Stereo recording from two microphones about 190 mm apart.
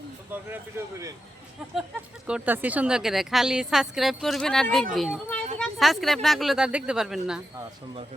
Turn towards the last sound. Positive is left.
turn(degrees=-5)  # may be behind; listen again after turning